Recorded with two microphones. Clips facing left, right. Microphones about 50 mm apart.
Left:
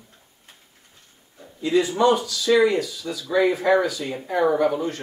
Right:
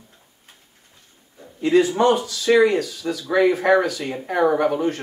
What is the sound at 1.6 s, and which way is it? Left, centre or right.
Speech, right.